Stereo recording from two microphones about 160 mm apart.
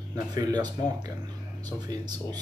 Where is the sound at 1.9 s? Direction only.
25° right (ahead or behind).